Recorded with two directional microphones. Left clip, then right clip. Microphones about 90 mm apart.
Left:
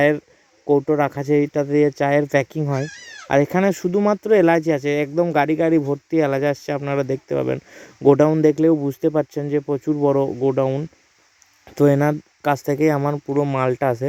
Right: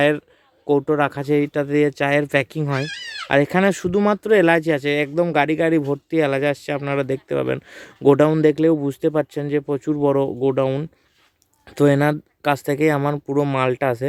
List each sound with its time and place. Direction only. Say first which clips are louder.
0.9 s speech: even; 25° left (ahead or behind)
3.6 s speech: even; 10° left (ahead or behind)
11.7 s speech: even; 25° left (ahead or behind)
13.1 s speech: even; 5° right (ahead or behind)
13.6 s speech: even; 20° left (ahead or behind)